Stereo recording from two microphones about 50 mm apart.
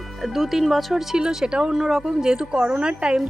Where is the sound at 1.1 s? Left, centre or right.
Centre.